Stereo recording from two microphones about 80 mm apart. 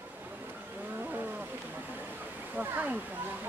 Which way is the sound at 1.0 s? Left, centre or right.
Right.